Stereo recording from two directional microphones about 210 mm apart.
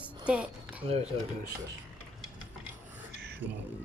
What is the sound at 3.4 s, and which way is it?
Speech, 60° right (ahead or behind).